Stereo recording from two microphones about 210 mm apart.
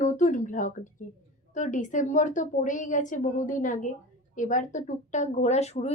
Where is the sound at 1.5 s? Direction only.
35° left (ahead or behind).